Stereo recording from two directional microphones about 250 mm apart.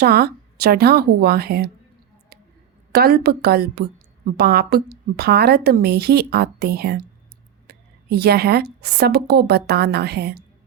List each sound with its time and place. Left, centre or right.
0.0 s a woman's voice: right
2.9 s a woman's voice: right